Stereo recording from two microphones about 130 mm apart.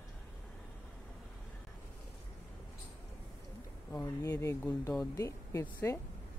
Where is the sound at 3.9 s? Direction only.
15° left (ahead or behind).